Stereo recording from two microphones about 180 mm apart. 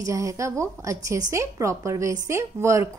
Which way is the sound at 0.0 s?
20° right (ahead or behind).